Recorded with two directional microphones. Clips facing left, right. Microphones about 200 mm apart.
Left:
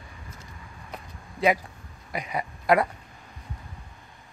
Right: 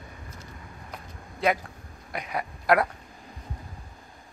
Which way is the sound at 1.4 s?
Centre (ahead or behind).